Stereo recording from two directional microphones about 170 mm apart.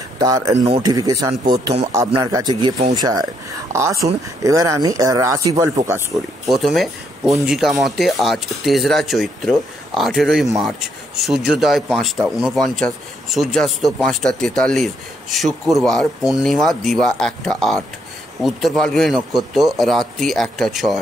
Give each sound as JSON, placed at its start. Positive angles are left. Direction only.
{"t": 0.2, "sound": "speech", "side_deg": -20}
{"t": 6.1, "sound": "speech", "side_deg": 0}